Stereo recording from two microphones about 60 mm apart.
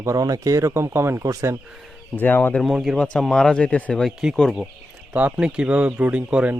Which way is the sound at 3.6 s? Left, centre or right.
Left.